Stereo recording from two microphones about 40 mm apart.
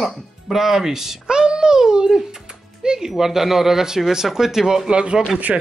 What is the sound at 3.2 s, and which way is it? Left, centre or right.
Speech, centre.